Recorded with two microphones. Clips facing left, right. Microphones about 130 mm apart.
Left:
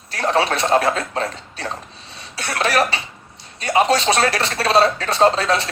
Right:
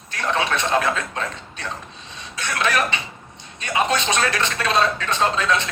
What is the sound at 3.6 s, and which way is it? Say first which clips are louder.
Speech: left 5 dB; 35° left (ahead or behind).